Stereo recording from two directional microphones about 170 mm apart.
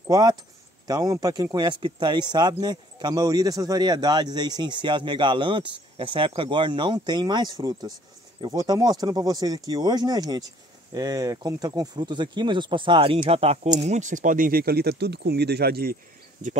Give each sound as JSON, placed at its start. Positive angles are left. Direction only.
{"t": 0.0, "sound": "speech", "side_deg": -20}